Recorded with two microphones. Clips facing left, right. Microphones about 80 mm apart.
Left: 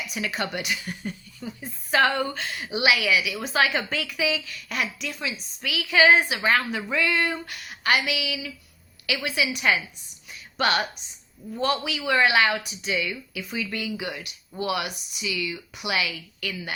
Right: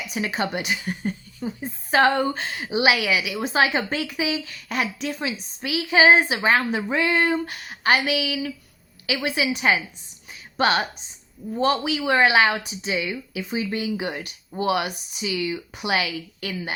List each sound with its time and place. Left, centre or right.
0.1 s a woman's voice: right
10.2 s a sound: right
11.6 s a woman's voice: right